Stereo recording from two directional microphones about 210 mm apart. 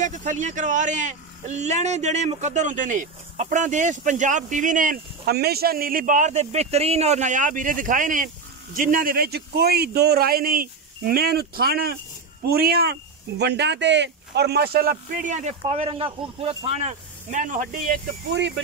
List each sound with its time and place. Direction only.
0.0 s a man's voice: 35° right (ahead or behind)